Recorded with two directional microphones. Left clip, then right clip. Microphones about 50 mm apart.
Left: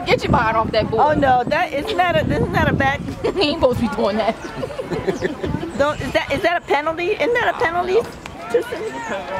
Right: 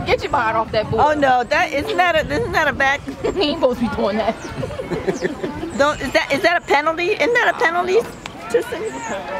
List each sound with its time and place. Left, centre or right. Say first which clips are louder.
0.1 s speech: left 1 dB; left
0.9 s speech: right 1 dB; right
3.3 s speech: left 1 dB; left
5.8 s speech: right 2 dB; right